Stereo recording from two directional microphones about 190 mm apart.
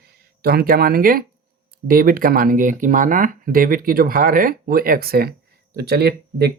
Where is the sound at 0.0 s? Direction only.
55° right (ahead or behind).